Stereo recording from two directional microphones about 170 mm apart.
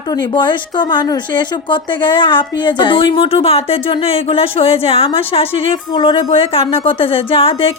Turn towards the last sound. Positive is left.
turn(degrees=35)  # may be behind; listen again after turning